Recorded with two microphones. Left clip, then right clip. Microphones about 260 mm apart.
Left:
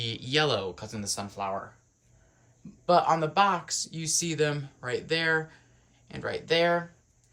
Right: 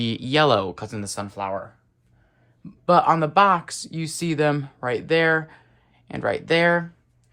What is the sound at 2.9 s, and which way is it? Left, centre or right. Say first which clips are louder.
Speech: right 6 dB; right.